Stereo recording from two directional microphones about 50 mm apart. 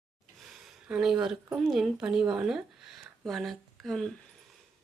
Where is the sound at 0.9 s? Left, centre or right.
Centre.